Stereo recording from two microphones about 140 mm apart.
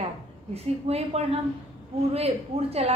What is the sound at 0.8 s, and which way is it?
A woman's voice, 45° right (ahead or behind).